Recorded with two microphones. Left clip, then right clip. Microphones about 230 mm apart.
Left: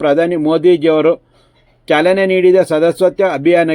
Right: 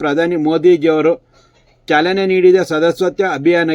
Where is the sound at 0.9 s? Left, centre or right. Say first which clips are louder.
Left 2 dB; left.